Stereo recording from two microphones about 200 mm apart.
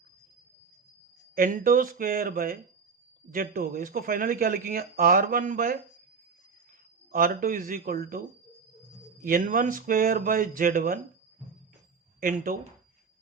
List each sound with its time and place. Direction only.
1.4 s speech: 40° right (ahead or behind)
7.1 s speech: 45° right (ahead or behind)
9.2 s speech: 40° right (ahead or behind)
12.2 s speech: 40° right (ahead or behind)